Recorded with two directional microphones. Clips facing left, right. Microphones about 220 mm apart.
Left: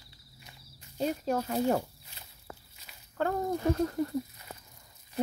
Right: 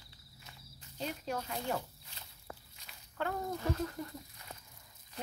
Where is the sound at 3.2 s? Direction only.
45° left (ahead or behind).